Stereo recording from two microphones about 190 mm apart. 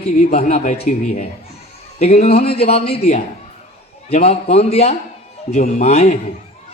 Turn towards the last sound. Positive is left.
turn(degrees=35)  # may be behind; listen again after turning